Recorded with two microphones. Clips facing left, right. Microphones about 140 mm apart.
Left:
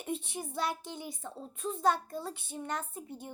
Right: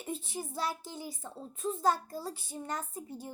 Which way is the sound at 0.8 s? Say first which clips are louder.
Even; 30° right (ahead or behind).